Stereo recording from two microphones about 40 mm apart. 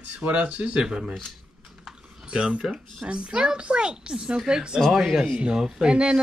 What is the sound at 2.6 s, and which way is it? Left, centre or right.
Speech, centre.